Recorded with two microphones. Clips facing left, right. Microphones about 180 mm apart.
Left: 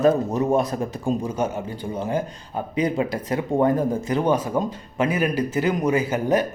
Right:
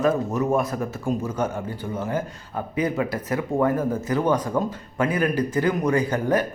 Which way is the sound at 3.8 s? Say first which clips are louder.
Left 1 dB; 15° left (ahead or behind).